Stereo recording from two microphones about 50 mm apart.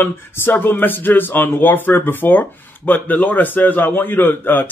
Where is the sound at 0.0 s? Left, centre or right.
Left.